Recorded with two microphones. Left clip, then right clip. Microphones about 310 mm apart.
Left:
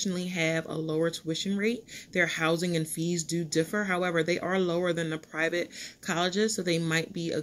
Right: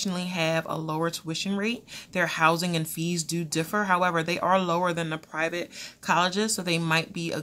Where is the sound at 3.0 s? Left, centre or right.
Centre.